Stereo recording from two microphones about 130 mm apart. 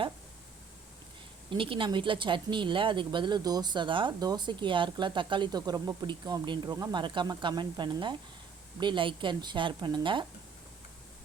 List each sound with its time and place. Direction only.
1.5 s speech: 40° right (ahead or behind)
6.7 s speech: 25° right (ahead or behind)
7.0 s speech: 35° right (ahead or behind)